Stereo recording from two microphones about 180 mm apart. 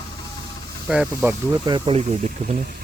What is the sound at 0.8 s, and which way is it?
Speech, 5° right (ahead or behind).